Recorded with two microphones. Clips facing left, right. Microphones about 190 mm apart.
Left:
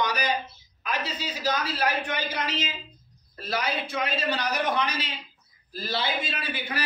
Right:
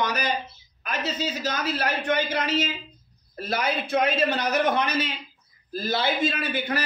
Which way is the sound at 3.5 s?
50° right (ahead or behind).